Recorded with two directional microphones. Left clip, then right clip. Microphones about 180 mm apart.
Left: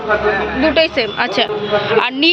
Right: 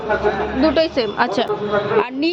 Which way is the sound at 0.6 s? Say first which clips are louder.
Left 2 dB; 25° right (ahead or behind).